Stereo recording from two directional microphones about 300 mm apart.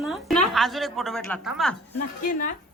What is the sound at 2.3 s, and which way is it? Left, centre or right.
Speech, left.